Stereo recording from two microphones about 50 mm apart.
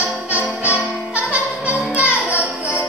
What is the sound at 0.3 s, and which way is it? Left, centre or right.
Music, right.